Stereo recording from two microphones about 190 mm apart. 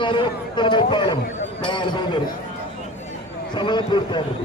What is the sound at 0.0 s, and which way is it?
A man's voice, 25° left (ahead or behind).